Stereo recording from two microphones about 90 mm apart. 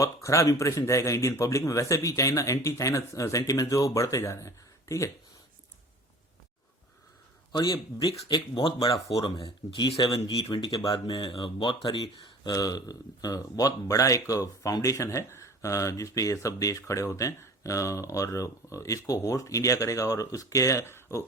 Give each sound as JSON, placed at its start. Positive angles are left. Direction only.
{"t": 0.0, "sound": "speech", "side_deg": 35}
{"t": 7.5, "sound": "speech", "side_deg": 65}
{"t": 10.8, "sound": "speech", "side_deg": 45}
{"t": 12.5, "sound": "speech", "side_deg": 45}